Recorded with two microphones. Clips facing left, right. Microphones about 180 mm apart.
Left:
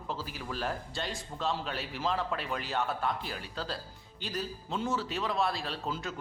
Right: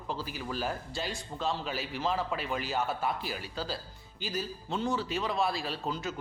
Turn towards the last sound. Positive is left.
turn(degrees=0)  # may be behind; listen again after turning